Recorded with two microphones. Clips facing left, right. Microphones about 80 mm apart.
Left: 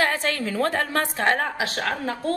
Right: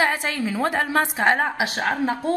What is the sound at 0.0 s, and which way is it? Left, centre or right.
A woman's voice, centre.